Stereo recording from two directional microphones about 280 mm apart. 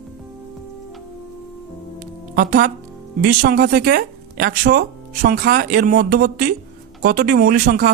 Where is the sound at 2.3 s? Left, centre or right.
Right.